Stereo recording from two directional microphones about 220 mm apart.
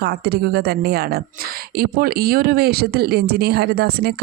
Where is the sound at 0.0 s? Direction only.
45° right (ahead or behind).